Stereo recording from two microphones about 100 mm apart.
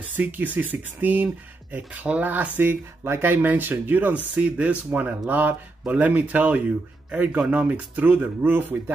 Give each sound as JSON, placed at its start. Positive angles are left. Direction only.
{"t": 0.1, "sound": "speech", "side_deg": -20}